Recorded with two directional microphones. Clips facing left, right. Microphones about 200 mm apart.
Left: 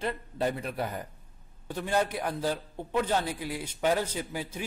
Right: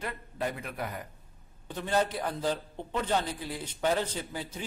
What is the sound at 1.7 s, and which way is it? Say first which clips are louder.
A man's voice: even; 10° left (ahead or behind).